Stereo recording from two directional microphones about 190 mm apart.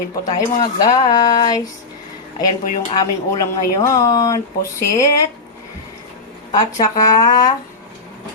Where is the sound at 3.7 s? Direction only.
20° left (ahead or behind).